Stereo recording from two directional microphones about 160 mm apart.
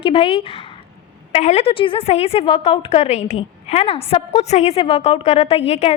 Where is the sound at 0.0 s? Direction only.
35° left (ahead or behind).